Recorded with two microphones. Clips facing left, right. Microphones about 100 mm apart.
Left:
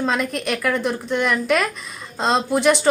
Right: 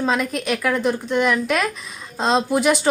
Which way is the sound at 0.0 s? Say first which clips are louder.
Right 1 dB; centre (ahead or behind).